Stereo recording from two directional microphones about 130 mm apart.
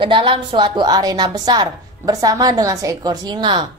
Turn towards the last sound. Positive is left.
turn(degrees=-35)  # may be behind; listen again after turning